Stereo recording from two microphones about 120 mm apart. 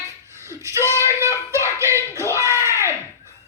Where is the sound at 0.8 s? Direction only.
20° left (ahead or behind).